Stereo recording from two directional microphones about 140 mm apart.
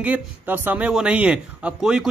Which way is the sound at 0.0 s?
10° right (ahead or behind).